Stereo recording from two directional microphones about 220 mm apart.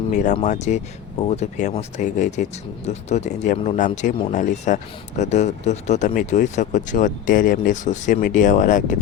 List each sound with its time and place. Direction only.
0.1 s speech: 35° left (ahead or behind)